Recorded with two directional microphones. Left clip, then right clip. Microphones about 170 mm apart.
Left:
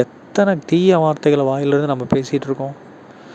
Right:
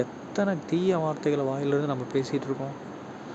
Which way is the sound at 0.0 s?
50° left (ahead or behind).